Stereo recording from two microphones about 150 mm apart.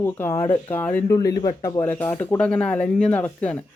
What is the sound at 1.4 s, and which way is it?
Speech, 25° left (ahead or behind).